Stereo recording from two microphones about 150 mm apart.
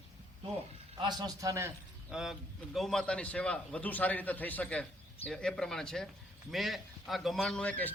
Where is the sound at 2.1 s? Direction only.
5° right (ahead or behind).